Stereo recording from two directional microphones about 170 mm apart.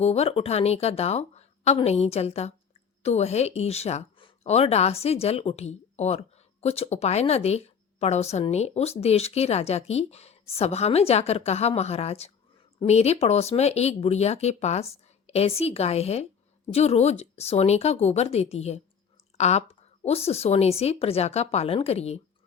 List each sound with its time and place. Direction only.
0.0 s speech: 35° left (ahead or behind)